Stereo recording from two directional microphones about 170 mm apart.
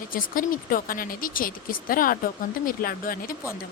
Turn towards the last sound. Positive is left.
turn(degrees=55)  # may be behind; listen again after turning